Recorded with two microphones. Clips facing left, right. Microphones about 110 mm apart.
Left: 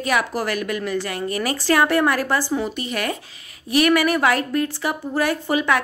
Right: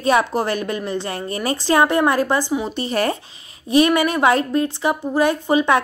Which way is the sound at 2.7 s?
35° right (ahead or behind).